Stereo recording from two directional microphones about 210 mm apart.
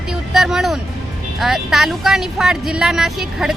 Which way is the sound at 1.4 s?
Centre (ahead or behind).